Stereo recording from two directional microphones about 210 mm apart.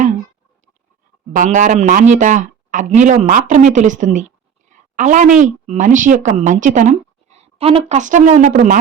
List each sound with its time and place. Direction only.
1.3 s speech: 40° right (ahead or behind)
4.7 s a sound: 35° right (ahead or behind)
5.5 s speech: 35° right (ahead or behind)